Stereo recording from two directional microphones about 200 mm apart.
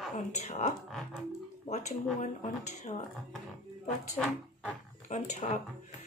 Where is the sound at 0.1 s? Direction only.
35° left (ahead or behind).